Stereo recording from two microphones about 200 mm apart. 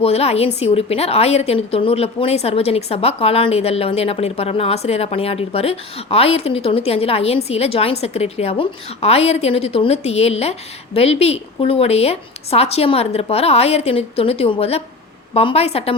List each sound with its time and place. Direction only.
0.0 s a woman's voice: 30° left (ahead or behind)